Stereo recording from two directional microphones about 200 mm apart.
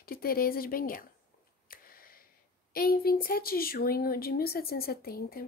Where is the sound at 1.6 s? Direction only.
45° left (ahead or behind).